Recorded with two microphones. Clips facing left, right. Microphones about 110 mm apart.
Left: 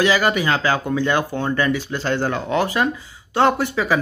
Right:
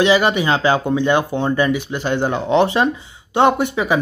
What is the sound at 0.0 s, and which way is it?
Speech, 20° right (ahead or behind).